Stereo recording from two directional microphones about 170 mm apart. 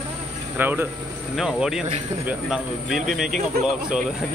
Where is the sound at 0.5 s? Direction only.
10° right (ahead or behind).